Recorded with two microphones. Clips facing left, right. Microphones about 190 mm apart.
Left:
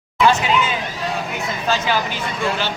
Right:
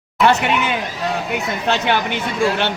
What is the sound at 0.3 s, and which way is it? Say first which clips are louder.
A woman's voice: right 1 dB; 65° right (ahead or behind).